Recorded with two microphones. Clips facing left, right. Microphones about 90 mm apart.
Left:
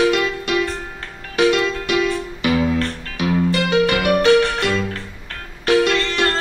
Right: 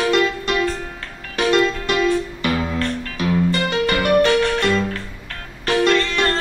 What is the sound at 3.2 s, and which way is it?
Music, 40° right (ahead or behind).